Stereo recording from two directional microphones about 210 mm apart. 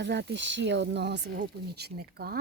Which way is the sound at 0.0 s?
55° right (ahead or behind).